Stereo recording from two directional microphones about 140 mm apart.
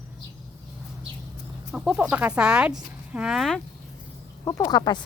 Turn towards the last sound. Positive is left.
turn(degrees=30)  # may be behind; listen again after turning